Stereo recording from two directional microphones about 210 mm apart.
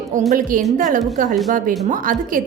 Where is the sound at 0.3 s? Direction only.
40° right (ahead or behind).